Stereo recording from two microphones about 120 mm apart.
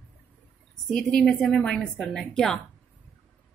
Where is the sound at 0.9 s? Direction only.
5° left (ahead or behind).